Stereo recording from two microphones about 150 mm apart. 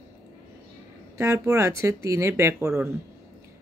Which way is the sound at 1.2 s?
15° right (ahead or behind).